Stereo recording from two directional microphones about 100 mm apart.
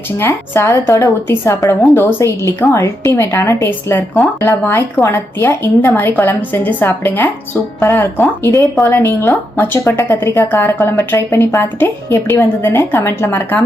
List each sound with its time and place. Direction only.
0.2 s speech: 25° left (ahead or behind)